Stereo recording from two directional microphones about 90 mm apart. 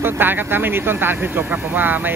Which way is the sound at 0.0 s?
25° right (ahead or behind).